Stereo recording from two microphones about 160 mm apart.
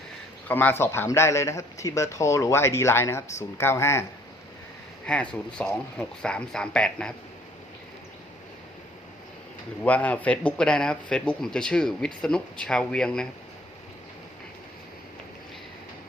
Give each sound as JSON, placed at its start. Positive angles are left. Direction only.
{"t": 0.4, "sound": "a man's voice", "side_deg": 10}
{"t": 5.0, "sound": "speech", "side_deg": 5}
{"t": 9.8, "sound": "speech", "side_deg": 10}